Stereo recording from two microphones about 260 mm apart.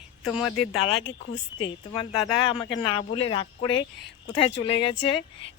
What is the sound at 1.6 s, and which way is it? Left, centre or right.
Speech, centre.